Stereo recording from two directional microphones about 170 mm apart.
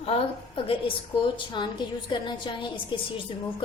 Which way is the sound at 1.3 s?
25° left (ahead or behind).